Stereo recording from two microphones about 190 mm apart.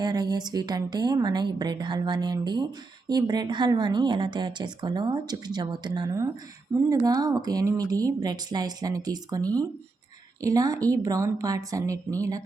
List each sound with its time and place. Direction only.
0.0 s a woman's voice: 20° right (ahead or behind)